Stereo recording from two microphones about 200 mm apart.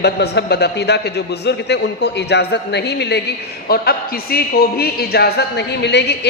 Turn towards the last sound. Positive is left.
turn(degrees=60)  # may be behind; listen again after turning